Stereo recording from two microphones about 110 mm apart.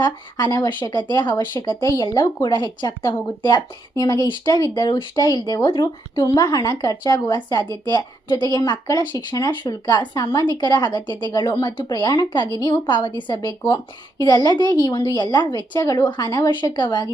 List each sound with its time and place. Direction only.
0.0 s speech: 40° left (ahead or behind)